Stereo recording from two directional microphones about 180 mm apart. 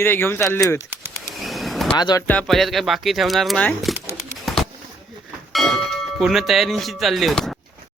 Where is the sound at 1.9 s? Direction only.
25° left (ahead or behind).